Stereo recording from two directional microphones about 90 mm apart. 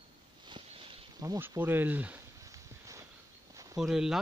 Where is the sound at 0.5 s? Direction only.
75° right (ahead or behind).